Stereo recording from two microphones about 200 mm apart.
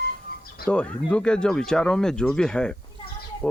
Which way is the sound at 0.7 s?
5° left (ahead or behind).